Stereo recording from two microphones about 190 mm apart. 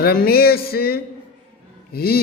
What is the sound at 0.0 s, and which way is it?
Music, 55° left (ahead or behind).